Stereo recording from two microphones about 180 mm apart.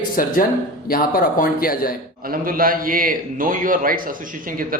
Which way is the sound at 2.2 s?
50° right (ahead or behind).